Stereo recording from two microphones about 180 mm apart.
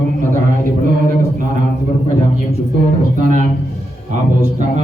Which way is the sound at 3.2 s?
45° right (ahead or behind).